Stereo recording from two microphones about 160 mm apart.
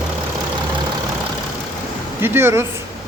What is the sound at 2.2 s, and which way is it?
Speech, 15° right (ahead or behind).